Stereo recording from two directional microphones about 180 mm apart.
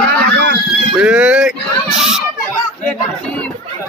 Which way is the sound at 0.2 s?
65° right (ahead or behind).